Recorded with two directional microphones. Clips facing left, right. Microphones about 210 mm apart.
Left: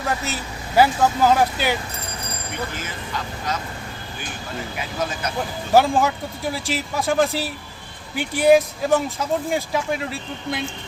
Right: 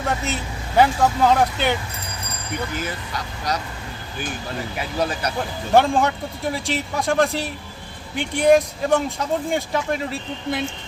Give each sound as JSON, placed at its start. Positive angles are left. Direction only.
{"t": 0.0, "sound": "speech", "side_deg": 0}
{"t": 5.4, "sound": "speech", "side_deg": 5}